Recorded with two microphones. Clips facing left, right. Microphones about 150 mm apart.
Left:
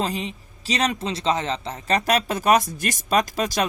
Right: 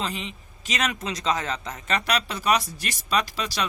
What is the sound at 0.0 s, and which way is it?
A man's voice, 40° left (ahead or behind).